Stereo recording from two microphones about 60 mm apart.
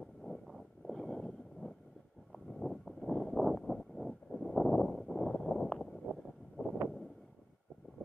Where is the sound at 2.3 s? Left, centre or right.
Centre.